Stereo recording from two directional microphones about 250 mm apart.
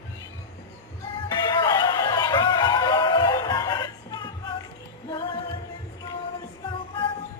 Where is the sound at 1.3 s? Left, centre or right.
Centre.